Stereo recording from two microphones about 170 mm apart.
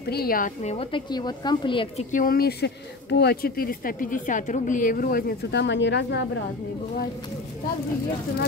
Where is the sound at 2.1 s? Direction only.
55° left (ahead or behind); by 6.2 s 85° left.